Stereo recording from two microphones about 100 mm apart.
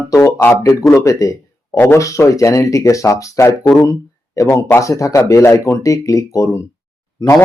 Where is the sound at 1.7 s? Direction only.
20° left (ahead or behind).